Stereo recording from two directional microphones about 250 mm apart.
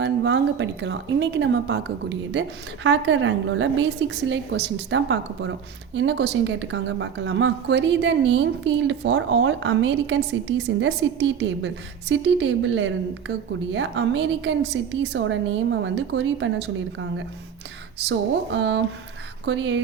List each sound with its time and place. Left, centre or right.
0.0 s a woman's voice: right